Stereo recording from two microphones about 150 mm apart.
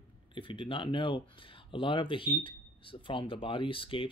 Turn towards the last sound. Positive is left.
turn(degrees=35)  # may be behind; listen again after turning